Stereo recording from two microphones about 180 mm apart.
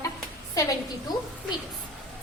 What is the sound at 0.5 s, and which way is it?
Speech, 20° left (ahead or behind).